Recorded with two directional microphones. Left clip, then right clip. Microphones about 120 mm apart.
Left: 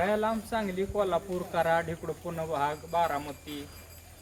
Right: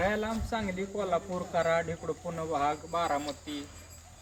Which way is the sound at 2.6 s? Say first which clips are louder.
Left 2 dB; 20° left (ahead or behind).